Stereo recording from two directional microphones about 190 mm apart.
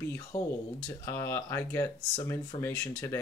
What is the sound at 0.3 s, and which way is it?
Speech, 5° left (ahead or behind).